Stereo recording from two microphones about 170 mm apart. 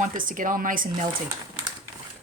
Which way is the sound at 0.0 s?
50° right (ahead or behind).